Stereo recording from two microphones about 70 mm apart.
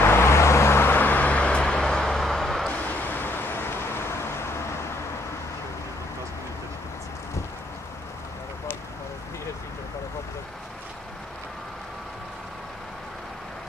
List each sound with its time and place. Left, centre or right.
0.0 s vehicle: left; by 2.7 s centre
2.7 s vehicle: left